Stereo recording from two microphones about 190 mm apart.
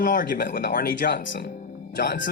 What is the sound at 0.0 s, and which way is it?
Speech, 45° left (ahead or behind).